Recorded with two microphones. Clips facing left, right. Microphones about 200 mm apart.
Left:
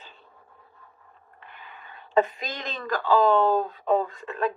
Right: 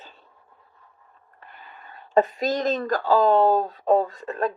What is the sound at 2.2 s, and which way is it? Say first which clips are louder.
A woman's voice: right 4 dB; 40° right (ahead or behind).